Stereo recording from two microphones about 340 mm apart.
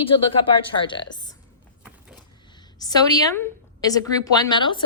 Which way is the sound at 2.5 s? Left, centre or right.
Centre.